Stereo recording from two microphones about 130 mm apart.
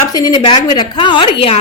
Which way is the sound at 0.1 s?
30° left (ahead or behind).